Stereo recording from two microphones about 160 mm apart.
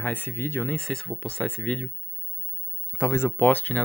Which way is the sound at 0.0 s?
10° left (ahead or behind).